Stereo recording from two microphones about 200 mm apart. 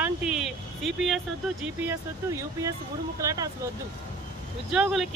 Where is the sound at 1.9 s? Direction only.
15° right (ahead or behind).